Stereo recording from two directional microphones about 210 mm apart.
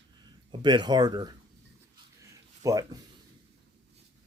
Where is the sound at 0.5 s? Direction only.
20° right (ahead or behind).